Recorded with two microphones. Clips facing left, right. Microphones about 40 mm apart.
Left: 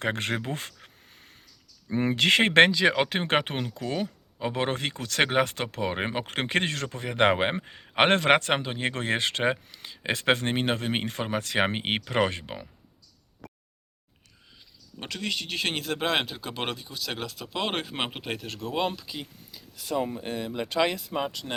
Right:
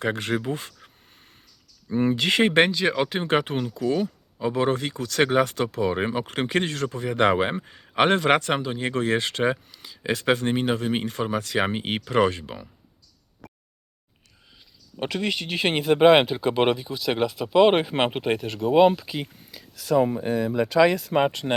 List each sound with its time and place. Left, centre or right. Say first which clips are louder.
0.0 s a sound: right 3 dB; left
1.9 s speech: right 1 dB; left
15.0 s speech: right 6 dB; right
18.9 s speech: right 6 dB; right
19.5 s a sound: right 3 dB; right
21.1 s speech: right 9 dB; right